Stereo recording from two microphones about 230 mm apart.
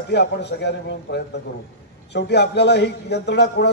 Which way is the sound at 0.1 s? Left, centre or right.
Left.